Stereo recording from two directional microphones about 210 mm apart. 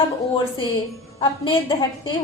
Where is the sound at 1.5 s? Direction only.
20° left (ahead or behind).